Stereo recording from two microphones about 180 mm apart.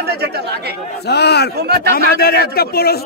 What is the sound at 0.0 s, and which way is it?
Speech, 65° right (ahead or behind).